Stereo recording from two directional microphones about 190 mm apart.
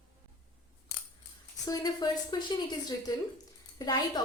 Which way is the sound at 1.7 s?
20° left (ahead or behind).